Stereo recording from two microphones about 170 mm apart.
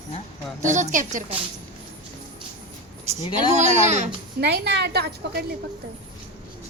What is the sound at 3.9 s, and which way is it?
Speech, 45° right (ahead or behind).